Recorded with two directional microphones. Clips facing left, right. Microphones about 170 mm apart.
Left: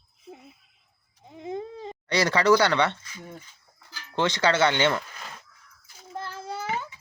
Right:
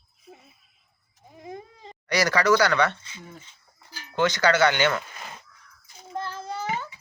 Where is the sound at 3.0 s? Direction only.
25° right (ahead or behind).